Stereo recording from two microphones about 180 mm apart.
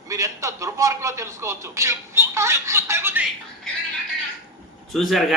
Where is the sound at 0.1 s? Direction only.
15° right (ahead or behind).